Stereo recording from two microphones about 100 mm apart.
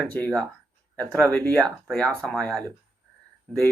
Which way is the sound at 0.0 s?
15° left (ahead or behind).